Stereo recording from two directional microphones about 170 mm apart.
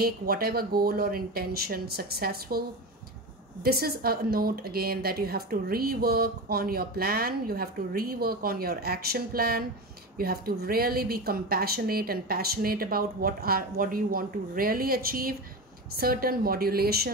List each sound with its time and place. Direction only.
0.0 s a woman's voice: 65° right (ahead or behind)
3.6 s a woman's voice: 65° right (ahead or behind)